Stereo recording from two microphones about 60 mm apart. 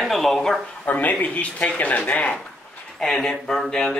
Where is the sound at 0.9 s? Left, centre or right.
Left.